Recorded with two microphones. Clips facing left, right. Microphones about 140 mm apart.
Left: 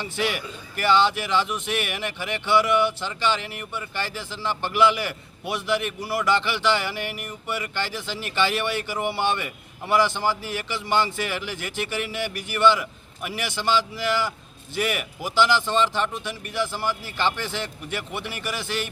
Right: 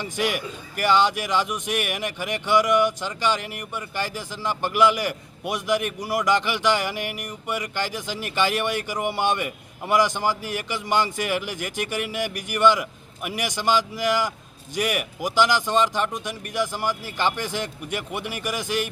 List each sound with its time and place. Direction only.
0.0 s speech: 10° right (ahead or behind)